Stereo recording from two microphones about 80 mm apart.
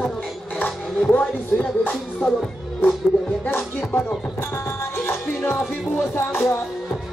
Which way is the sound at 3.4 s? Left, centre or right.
Left.